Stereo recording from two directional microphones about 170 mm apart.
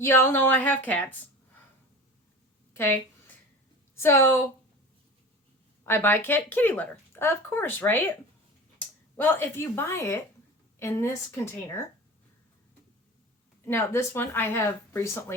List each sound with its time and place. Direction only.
0.0 s speech: 15° left (ahead or behind)
2.7 s a woman's voice: 15° left (ahead or behind)
5.8 s speech: 15° left (ahead or behind)
9.1 s speech: 15° left (ahead or behind)
13.7 s speech: 15° left (ahead or behind)